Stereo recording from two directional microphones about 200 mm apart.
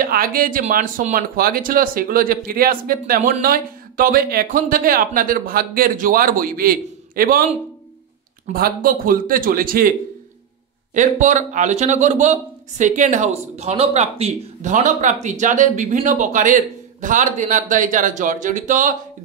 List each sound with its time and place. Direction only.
0.0 s speech: 45° right (ahead or behind)
8.5 s speech: 45° right (ahead or behind)
11.0 s speech: 40° right (ahead or behind)